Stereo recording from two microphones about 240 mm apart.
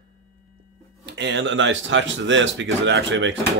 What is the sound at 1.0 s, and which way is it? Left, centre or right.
Speech, right.